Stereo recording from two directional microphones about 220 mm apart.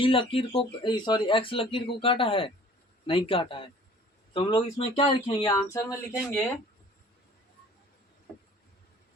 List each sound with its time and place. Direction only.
0.0 s speech: 25° left (ahead or behind)